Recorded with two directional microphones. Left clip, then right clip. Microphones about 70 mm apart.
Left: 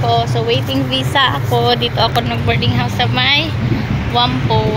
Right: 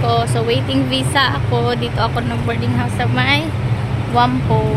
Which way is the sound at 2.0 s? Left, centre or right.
Right.